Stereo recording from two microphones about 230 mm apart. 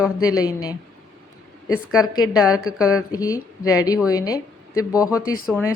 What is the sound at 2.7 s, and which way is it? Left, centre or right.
Speech, centre.